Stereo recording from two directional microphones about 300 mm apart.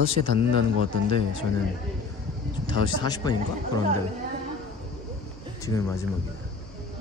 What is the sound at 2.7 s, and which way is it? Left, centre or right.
Speech, centre.